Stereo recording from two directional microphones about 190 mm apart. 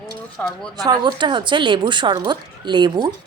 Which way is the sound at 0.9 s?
25° right (ahead or behind).